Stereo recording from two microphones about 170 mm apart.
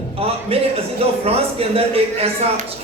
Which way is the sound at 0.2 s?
35° right (ahead or behind).